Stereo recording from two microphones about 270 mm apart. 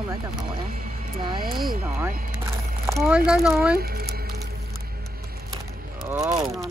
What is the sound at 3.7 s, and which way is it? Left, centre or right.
Music, right.